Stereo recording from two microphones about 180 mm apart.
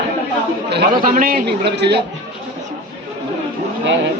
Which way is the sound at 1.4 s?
70° right (ahead or behind).